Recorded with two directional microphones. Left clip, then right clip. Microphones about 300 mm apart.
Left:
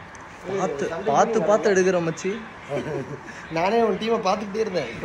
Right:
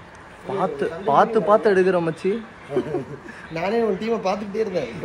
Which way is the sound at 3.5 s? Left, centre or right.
Centre.